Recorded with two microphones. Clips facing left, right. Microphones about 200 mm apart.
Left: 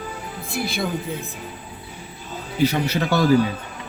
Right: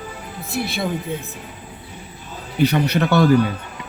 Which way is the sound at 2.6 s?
60° right (ahead or behind).